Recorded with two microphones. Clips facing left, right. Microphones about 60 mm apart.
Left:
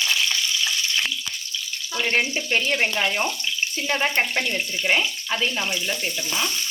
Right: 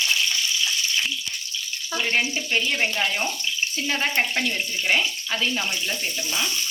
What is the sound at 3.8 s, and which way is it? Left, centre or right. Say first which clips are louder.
Speech: left 2 dB; centre.